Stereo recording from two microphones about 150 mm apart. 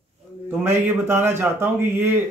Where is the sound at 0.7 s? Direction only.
15° right (ahead or behind).